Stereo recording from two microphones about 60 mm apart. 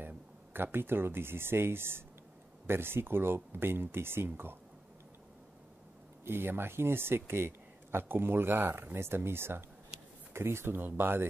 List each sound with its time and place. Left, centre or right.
0.0 s speech: right
6.2 s speech: right